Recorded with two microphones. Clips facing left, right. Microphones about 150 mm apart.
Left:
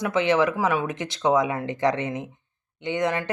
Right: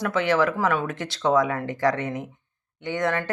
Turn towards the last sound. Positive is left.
turn(degrees=20)  # may be behind; listen again after turning